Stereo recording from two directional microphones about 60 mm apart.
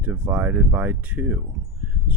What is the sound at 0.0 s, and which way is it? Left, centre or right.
Speech, right.